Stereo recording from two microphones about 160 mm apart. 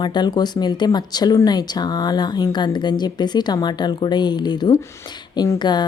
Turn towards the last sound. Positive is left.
turn(degrees=25)  # may be behind; listen again after turning